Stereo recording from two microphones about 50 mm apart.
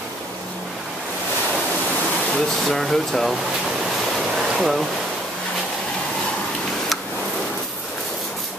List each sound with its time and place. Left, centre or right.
2.3 s speech: centre
4.6 s speech: centre